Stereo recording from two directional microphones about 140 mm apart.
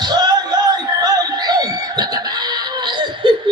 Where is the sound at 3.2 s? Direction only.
35° right (ahead or behind).